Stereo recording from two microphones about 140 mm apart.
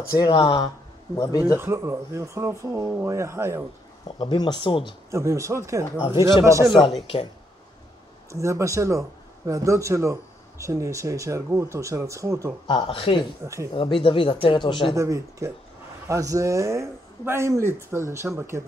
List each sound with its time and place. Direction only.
0.1 s speech: 30° left (ahead or behind)
1.1 s speech: 25° left (ahead or behind)
1.6 s speech: 20° right (ahead or behind)
4.2 s speech: 30° left (ahead or behind)
5.1 s speech: 20° right (ahead or behind)
8.3 s speech: 20° right (ahead or behind)
12.6 s speech: 35° left (ahead or behind)
13.4 s speech: 25° right (ahead or behind)
13.7 s speech: 40° left (ahead or behind)
15.0 s speech: 20° right (ahead or behind)